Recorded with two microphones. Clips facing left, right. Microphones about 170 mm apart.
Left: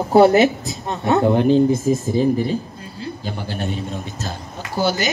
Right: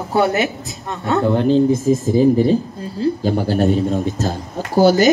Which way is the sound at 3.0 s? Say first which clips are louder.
Right 11 dB; 40° right (ahead or behind).